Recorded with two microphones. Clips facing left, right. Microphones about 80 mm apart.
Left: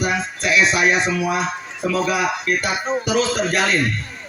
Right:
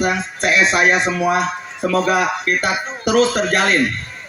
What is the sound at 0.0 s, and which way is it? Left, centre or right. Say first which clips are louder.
Speech: right 3 dB; right.